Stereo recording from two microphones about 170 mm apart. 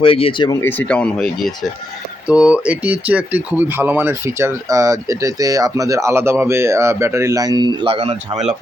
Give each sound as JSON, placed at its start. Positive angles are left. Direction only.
{"t": 0.0, "sound": "speech", "side_deg": 30}
{"t": 0.6, "sound": "speech", "side_deg": 10}